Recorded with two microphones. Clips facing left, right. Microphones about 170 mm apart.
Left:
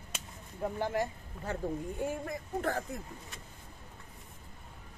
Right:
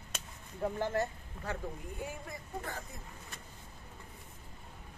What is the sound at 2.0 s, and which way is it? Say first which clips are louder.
Speech: left 5 dB; 60° left (ahead or behind).